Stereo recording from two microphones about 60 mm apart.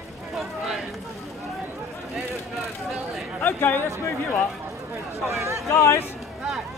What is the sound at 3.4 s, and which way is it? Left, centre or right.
Speech, left.